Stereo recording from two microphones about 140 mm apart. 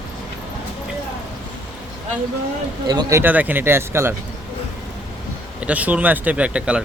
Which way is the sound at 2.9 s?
25° right (ahead or behind).